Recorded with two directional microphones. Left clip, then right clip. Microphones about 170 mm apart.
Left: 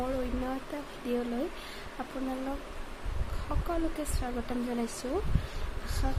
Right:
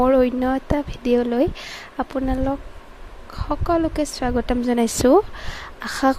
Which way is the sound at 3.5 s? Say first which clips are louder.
Right 14 dB; 45° right (ahead or behind).